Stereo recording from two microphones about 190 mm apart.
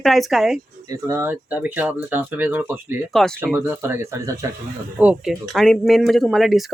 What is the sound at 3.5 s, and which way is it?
Speech, 10° right (ahead or behind).